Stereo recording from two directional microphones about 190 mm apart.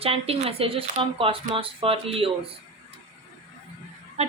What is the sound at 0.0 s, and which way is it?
Speech, 30° right (ahead or behind).